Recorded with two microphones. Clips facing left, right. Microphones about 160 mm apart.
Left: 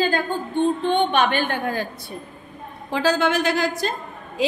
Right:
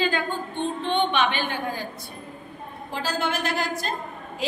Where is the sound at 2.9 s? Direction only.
85° left.